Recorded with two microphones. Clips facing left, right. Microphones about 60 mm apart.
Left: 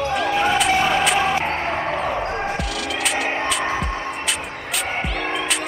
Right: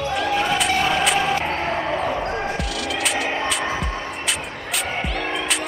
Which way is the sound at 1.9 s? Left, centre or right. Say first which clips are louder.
Even; centre.